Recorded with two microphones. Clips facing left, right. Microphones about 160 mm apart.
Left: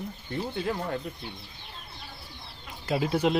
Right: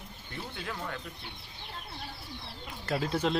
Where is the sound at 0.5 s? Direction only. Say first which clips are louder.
Left 7 dB; 30° left (ahead or behind).